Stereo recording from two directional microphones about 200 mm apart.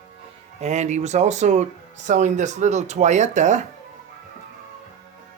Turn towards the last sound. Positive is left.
turn(degrees=-35)  # may be behind; listen again after turning